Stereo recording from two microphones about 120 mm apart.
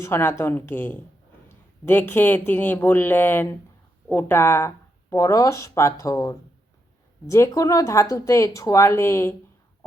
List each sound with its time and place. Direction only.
0.0 s speech: 20° left (ahead or behind)